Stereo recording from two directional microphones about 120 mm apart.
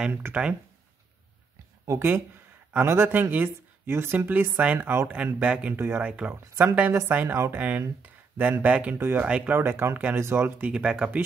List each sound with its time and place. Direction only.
0.0 s speech: 15° right (ahead or behind)
1.9 s speech: 20° right (ahead or behind)
10.7 s speech: 5° right (ahead or behind)